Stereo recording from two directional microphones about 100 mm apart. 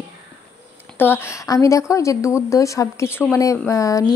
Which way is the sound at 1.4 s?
35° left (ahead or behind).